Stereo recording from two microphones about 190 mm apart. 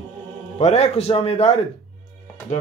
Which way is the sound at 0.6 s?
35° left (ahead or behind).